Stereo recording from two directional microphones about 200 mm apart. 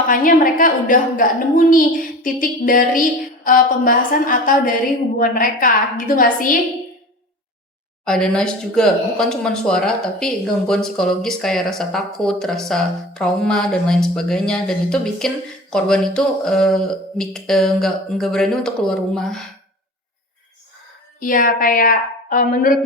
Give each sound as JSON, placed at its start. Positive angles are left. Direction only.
{"t": 0.1, "sound": "a woman's voice", "side_deg": 45}
{"t": 8.0, "sound": "speech", "side_deg": 5}
{"t": 21.2, "sound": "a woman's voice", "side_deg": 45}